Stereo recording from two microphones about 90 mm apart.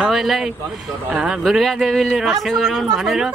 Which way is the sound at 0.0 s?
5° right (ahead or behind).